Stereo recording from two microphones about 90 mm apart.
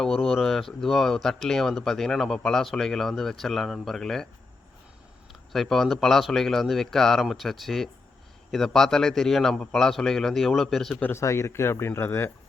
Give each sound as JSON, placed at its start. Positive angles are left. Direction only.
{"t": 0.0, "sound": "speech", "side_deg": 5}
{"t": 5.3, "sound": "speech", "side_deg": 0}
{"t": 11.0, "sound": "speech", "side_deg": 30}